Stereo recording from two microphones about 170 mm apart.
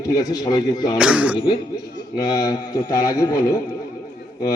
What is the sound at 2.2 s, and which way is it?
A man's voice, 20° left (ahead or behind).